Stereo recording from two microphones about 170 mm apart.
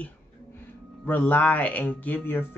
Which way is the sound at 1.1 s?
10° left (ahead or behind).